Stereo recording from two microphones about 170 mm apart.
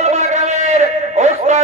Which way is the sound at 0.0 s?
40° right (ahead or behind).